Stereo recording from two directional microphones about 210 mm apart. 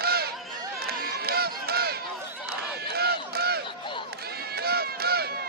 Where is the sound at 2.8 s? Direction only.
50° right (ahead or behind).